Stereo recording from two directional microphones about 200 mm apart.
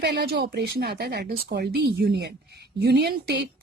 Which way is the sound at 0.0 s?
55° right (ahead or behind).